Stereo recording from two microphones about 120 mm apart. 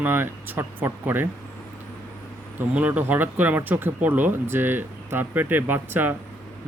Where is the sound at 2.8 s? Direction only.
10° right (ahead or behind).